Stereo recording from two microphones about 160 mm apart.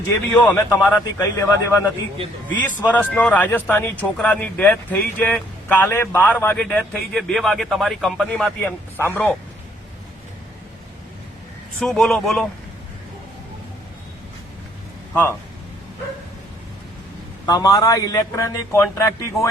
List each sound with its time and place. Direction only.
0.4 s speech: 15° left (ahead or behind)
11.8 s a man's voice: centre (ahead or behind)
15.1 s speech: 10° left (ahead or behind)
17.4 s a man's voice: 25° left (ahead or behind)